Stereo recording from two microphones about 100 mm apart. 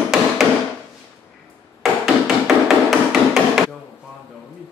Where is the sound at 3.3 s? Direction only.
Centre (ahead or behind).